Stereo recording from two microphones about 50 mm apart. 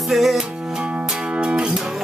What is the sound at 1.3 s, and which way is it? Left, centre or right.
Music, centre.